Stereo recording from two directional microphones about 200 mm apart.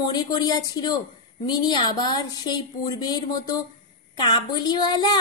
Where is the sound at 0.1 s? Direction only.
20° left (ahead or behind).